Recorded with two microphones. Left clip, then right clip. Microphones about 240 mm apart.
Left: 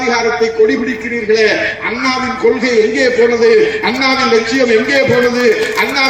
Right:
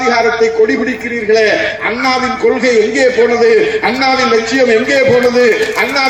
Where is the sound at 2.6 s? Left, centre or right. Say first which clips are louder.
Right 2 dB; centre.